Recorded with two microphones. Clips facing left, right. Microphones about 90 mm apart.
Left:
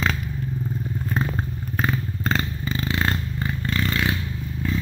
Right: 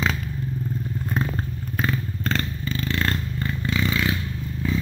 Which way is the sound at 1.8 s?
10° left (ahead or behind).